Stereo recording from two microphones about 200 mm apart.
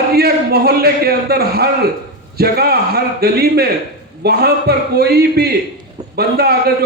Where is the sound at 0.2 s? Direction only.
50° right (ahead or behind).